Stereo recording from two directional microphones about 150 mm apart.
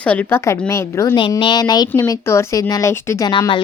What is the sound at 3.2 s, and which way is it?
Speech, 30° left (ahead or behind).